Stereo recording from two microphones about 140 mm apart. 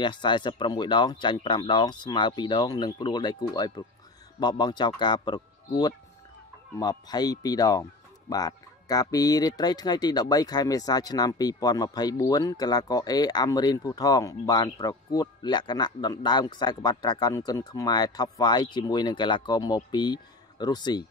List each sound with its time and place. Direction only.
0.0 s speech: 35° left (ahead or behind)